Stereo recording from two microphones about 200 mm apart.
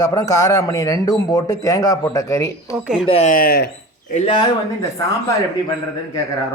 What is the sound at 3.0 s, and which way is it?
Speech, 35° left (ahead or behind).